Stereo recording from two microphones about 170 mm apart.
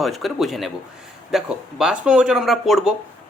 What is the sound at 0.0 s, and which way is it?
Speech, centre (ahead or behind).